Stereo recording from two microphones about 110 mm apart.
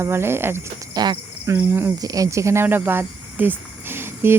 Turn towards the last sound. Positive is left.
turn(degrees=-20)  # may be behind; listen again after turning